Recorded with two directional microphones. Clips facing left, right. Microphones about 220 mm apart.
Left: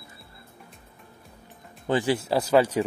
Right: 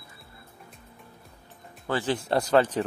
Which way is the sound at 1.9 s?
10° left (ahead or behind).